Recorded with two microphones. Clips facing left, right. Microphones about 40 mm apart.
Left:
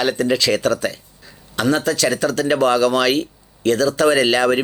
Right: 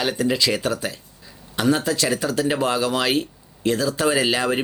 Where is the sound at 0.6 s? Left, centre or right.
Left.